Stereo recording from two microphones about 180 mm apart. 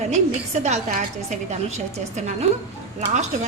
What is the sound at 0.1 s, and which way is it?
A woman's voice, 40° right (ahead or behind).